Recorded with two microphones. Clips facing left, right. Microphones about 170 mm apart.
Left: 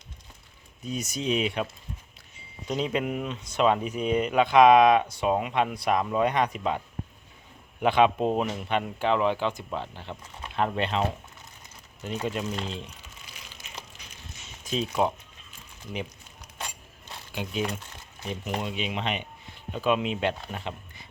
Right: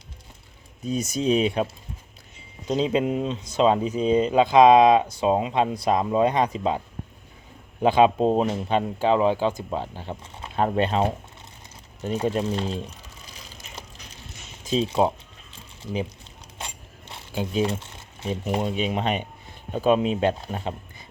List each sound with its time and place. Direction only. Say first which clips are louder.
0.9 s speech: right 6 dB; 30° right (ahead or behind)
12.0 s speech: right 6 dB; 35° right (ahead or behind)
13.2 s gush: right 3 dB; 35° right (ahead or behind)
14.7 s speech: right 5 dB; 30° right (ahead or behind)
15.5 s a sound: right 6 dB; 30° right (ahead or behind)
19.7 s speech: right 5 dB; 40° right (ahead or behind)